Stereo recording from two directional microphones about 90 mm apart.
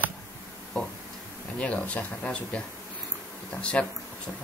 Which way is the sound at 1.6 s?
15° left (ahead or behind).